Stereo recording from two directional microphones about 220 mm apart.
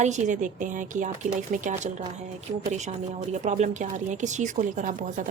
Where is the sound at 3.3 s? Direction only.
35° right (ahead or behind).